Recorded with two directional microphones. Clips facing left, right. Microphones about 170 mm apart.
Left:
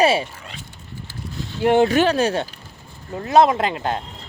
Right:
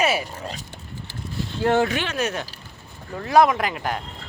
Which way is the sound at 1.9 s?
35° left (ahead or behind).